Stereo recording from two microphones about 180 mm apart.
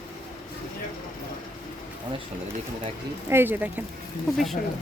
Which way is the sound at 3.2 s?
10° right (ahead or behind).